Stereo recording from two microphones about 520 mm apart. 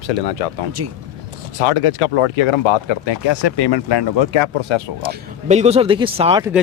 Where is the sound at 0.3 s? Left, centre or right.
Left.